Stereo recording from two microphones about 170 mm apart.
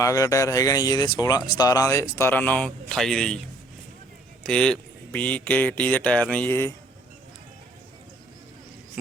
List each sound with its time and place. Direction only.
0.0 s speech: 20° left (ahead or behind); by 3.4 s 5° left (ahead or behind)
4.4 s speech: 5° left (ahead or behind)